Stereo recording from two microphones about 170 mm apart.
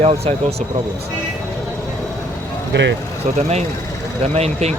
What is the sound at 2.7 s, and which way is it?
Speech, 90° right.